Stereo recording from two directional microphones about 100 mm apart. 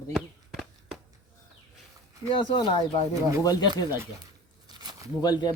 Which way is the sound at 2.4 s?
55° left (ahead or behind).